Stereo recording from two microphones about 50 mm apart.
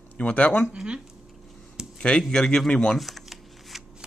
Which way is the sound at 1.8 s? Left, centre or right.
Centre.